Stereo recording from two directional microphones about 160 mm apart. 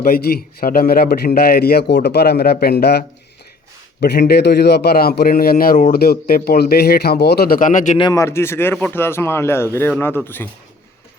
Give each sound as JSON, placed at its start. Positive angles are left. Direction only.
{"t": 0.0, "sound": "a man's voice", "side_deg": 70}
{"t": 4.0, "sound": "a man's voice", "side_deg": 90}
{"t": 7.9, "sound": "speech", "side_deg": 25}